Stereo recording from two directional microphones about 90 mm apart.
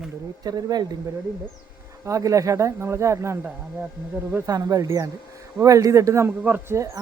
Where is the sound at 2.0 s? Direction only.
35° right (ahead or behind).